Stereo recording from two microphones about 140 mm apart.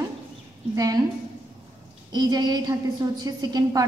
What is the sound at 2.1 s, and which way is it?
A woman's voice, 30° right (ahead or behind).